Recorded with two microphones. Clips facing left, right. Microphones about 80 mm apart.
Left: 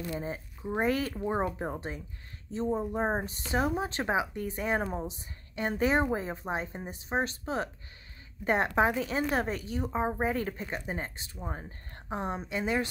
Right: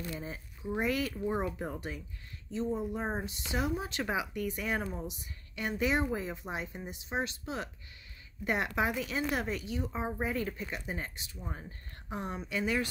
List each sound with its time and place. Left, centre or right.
0.1 s speech: left